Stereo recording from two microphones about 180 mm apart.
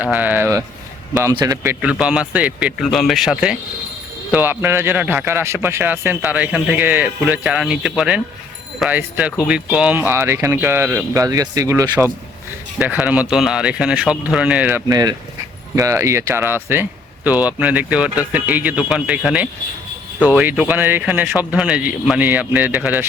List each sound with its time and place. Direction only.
0.0 s a man's voice: 10° right (ahead or behind)
1.8 s a man's voice: 5° right (ahead or behind)
14.8 s a man's voice: 20° right (ahead or behind)